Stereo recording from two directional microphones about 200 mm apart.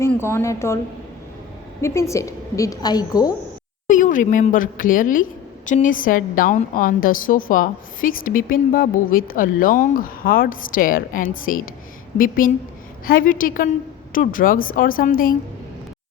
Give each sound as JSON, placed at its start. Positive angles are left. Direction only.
{"t": 0.0, "sound": "a woman's voice", "side_deg": 10}
{"t": 1.8, "sound": "a woman's voice", "side_deg": 15}
{"t": 3.8, "sound": "speech", "side_deg": 40}